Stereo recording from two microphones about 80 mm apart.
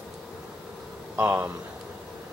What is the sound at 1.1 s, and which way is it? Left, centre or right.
Speech, right.